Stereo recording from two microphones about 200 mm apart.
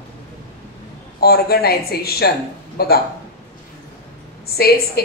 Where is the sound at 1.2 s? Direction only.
50° left (ahead or behind).